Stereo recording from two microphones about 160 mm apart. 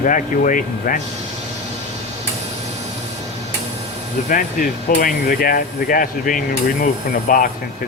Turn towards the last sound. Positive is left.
turn(degrees=60)  # may be behind; listen again after turning